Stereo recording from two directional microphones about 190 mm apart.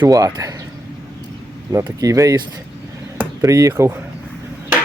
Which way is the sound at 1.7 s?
15° right (ahead or behind).